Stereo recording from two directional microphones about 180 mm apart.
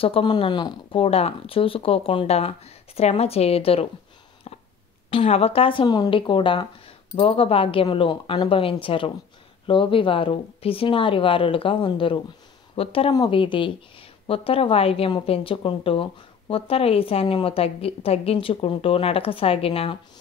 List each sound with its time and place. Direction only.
0.0 s speech: 30° left (ahead or behind)
4.5 s a sound: 35° left (ahead or behind)
5.1 s speech: 35° left (ahead or behind)